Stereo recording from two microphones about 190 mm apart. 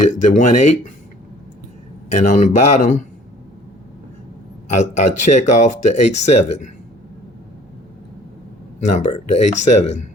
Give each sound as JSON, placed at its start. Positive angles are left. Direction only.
{"t": 0.1, "sound": "speech", "side_deg": 40}
{"t": 2.0, "sound": "speech", "side_deg": 40}
{"t": 4.7, "sound": "speech", "side_deg": 40}
{"t": 8.8, "sound": "speech", "side_deg": 35}